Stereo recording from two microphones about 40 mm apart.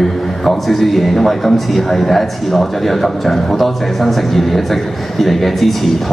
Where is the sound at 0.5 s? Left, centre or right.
Centre.